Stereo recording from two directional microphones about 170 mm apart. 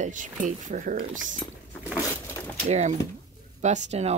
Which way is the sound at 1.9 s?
15° left (ahead or behind).